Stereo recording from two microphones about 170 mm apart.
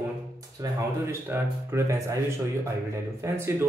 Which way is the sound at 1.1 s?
15° right (ahead or behind).